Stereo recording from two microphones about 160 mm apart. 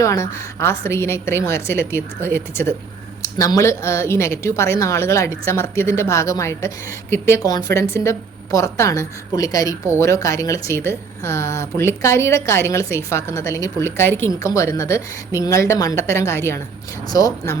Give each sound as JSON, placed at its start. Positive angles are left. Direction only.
{"t": 0.0, "sound": "a woman's voice", "side_deg": 20}